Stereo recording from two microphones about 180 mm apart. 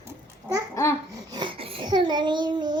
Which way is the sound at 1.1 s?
25° right (ahead or behind).